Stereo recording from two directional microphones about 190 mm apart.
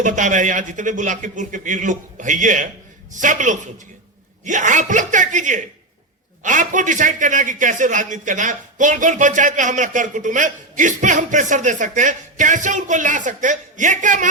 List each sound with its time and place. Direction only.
0.0 s a man's voice: 40° right (ahead or behind)